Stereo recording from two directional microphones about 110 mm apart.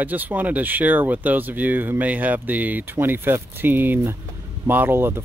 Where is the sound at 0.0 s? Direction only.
15° right (ahead or behind).